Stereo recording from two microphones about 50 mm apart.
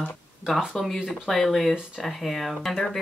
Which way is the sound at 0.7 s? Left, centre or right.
Centre.